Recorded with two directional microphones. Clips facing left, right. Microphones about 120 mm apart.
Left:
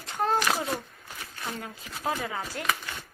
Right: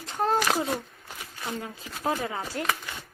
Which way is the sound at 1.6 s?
25° right (ahead or behind).